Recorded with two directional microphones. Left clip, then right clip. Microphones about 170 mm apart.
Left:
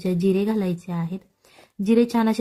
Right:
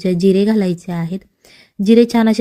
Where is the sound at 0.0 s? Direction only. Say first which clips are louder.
Right 8 dB; 25° right (ahead or behind).